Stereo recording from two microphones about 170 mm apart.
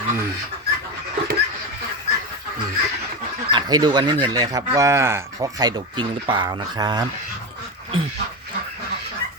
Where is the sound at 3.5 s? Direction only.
25° right (ahead or behind).